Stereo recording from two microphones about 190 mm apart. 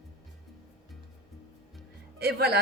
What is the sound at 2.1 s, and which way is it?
Speech, 55° right (ahead or behind).